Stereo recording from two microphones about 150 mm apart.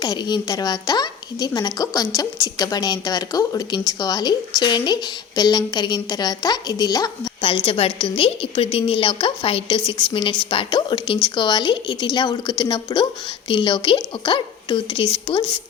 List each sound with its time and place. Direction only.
0.0 s a woman's voice: 25° left (ahead or behind)
7.4 s a woman's voice: 40° left (ahead or behind)